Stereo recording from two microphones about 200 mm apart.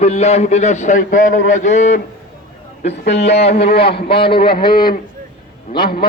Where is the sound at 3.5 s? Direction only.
55° left (ahead or behind).